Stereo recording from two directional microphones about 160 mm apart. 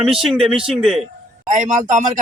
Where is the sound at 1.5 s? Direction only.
50° right (ahead or behind).